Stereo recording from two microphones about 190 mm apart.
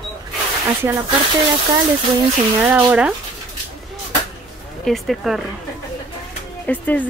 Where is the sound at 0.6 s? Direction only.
10° right (ahead or behind).